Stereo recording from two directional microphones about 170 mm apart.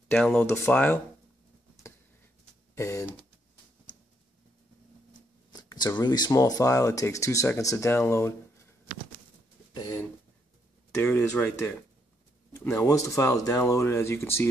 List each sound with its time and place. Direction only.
0.1 s speech: 5° left (ahead or behind)
2.7 s speech: 15° left (ahead or behind)
5.5 s speech: 25° left (ahead or behind)
9.8 s speech: 20° left (ahead or behind)
10.9 s speech: 10° left (ahead or behind)